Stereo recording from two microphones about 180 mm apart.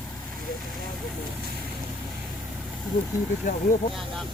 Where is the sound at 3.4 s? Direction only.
45° left (ahead or behind).